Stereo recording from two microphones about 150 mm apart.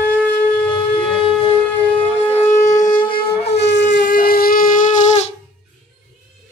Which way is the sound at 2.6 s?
25° left (ahead or behind).